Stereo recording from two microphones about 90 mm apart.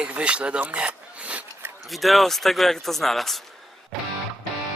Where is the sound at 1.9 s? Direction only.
Centre (ahead or behind).